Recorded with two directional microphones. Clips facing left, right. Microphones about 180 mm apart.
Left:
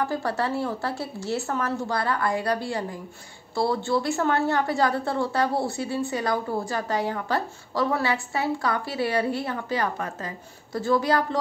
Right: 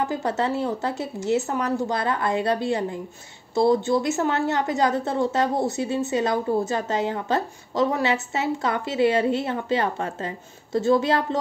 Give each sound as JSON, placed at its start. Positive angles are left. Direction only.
{"t": 0.0, "sound": "a woman's voice", "side_deg": -20}